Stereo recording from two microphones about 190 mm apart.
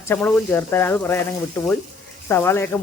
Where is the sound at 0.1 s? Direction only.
10° left (ahead or behind).